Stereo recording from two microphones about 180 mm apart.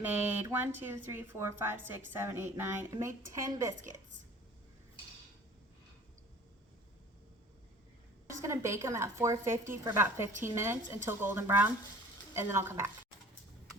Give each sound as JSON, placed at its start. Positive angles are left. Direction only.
{"t": 0.0, "sound": "speech", "side_deg": -10}
{"t": 8.4, "sound": "speech", "side_deg": -15}